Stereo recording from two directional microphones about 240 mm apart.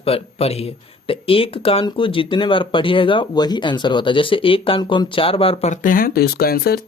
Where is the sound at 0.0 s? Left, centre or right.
Left.